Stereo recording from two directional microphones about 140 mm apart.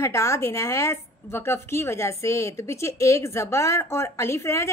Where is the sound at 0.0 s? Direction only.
20° left (ahead or behind).